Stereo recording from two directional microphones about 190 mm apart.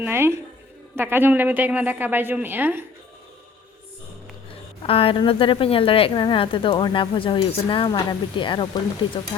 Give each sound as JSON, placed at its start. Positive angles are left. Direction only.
{"t": 0.0, "sound": "a woman's voice", "side_deg": -10}
{"t": 4.8, "sound": "a woman's voice", "side_deg": 30}